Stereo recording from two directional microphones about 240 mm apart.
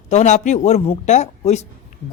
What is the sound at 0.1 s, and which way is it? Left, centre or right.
A man's voice, left.